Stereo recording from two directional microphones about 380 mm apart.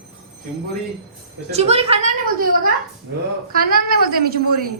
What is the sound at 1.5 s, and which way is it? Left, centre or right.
A woman's voice, centre.